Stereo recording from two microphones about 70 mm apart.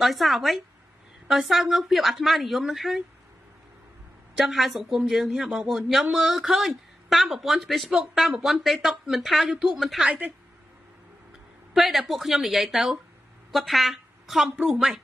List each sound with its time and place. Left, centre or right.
0.0 s speech: centre
4.4 s speech: centre
10.0 s a woman's voice: centre
11.7 s a woman's voice: centre